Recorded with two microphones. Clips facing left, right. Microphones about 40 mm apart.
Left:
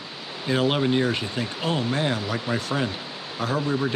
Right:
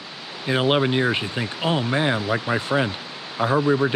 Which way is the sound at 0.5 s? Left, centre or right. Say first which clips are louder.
Right 2 dB; right.